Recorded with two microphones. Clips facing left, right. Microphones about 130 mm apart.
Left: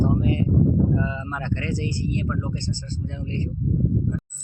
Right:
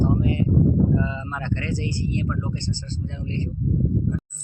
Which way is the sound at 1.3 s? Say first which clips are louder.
Even; 10° left (ahead or behind).